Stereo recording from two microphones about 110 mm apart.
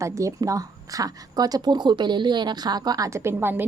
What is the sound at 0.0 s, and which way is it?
A woman's voice, 30° right (ahead or behind).